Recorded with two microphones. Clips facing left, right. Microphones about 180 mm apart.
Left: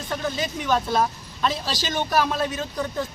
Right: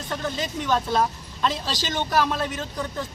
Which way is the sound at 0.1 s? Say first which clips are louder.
Left 1 dB; 15° left (ahead or behind).